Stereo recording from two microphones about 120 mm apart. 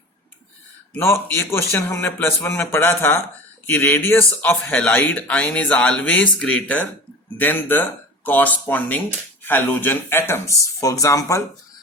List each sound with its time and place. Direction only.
0.9 s a man's voice: 20° left (ahead or behind)